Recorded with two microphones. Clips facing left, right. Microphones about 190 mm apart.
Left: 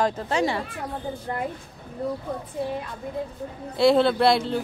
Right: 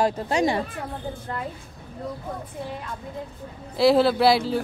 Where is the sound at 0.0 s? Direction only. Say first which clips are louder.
Right 1 dB; 15° right (ahead or behind).